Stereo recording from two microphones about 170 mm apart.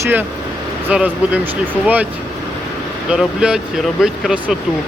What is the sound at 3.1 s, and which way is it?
Speech, 5° right (ahead or behind).